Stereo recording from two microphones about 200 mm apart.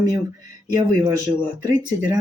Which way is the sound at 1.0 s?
20° right (ahead or behind).